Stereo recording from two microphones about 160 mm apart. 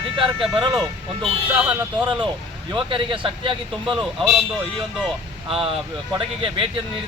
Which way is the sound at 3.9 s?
5° right (ahead or behind).